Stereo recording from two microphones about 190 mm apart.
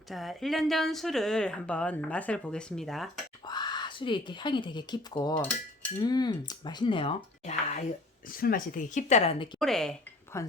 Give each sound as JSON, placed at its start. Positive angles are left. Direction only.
{"t": 0.1, "sound": "speech", "side_deg": 0}
{"t": 3.4, "sound": "speech", "side_deg": 20}
{"t": 8.3, "sound": "speech", "side_deg": 50}
{"t": 9.6, "sound": "speech", "side_deg": 5}
{"t": 10.3, "sound": "speech", "side_deg": 15}